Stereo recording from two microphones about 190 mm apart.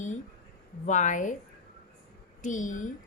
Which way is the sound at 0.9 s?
40° left (ahead or behind).